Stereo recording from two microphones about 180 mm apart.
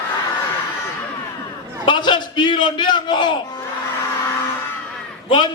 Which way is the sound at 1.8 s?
25° left (ahead or behind).